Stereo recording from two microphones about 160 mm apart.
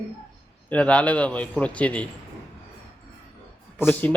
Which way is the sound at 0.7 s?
5° left (ahead or behind).